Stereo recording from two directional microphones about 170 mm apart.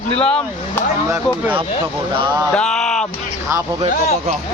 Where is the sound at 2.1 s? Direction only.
25° right (ahead or behind).